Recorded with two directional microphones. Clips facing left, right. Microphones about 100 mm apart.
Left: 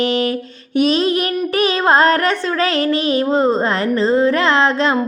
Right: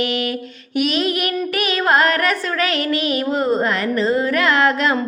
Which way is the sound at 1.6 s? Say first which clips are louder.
Left 4 dB; 30° left (ahead or behind).